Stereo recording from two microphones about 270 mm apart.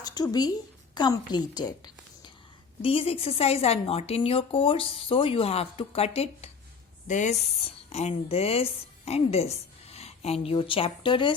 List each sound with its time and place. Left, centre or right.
0.0 s a woman's voice: centre